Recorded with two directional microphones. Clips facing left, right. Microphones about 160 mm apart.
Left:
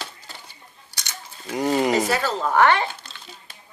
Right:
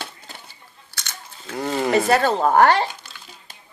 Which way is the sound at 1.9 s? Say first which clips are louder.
Right 4 dB; 60° right (ahead or behind).